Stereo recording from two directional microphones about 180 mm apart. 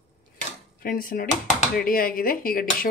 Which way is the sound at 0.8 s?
50° left (ahead or behind).